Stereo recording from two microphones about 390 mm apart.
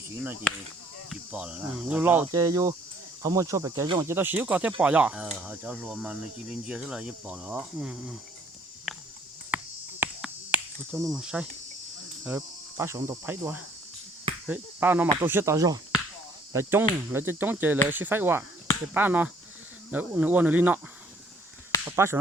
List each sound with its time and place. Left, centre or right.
0.5 s speech: centre
8.9 s a sound: centre
9.5 s cricket: centre
10.0 s finger snapping: centre
12.2 s cricket: centre
14.4 s speech: centre
21.9 s speech: centre